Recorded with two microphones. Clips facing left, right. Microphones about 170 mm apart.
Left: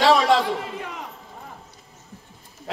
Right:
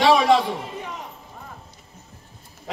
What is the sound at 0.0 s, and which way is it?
Speech, 15° right (ahead or behind).